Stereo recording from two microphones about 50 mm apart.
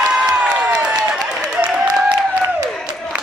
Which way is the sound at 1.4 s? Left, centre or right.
Right.